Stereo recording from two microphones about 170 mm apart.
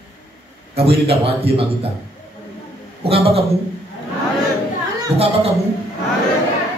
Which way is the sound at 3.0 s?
35° right (ahead or behind).